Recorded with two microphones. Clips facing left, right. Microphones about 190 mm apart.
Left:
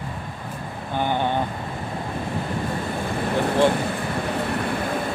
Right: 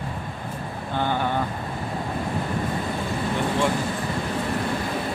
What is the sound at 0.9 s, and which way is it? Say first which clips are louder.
Vehicle: left 2 dB; 15° left (ahead or behind).